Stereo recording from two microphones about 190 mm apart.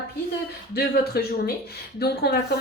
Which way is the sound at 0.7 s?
55° left (ahead or behind).